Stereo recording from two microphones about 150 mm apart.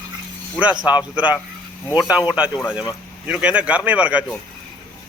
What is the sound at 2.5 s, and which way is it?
Speech, 15° left (ahead or behind).